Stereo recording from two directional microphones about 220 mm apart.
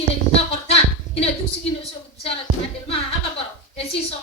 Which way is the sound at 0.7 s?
25° left (ahead or behind).